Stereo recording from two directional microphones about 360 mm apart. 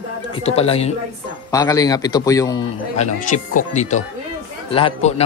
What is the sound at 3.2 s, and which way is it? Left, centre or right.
Speech, left.